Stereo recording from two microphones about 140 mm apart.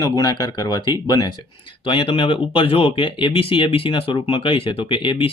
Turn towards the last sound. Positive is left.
turn(degrees=35)  # may be behind; listen again after turning